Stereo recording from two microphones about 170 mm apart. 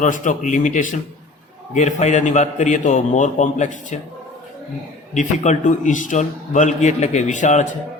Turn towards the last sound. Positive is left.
turn(degrees=45)  # may be behind; listen again after turning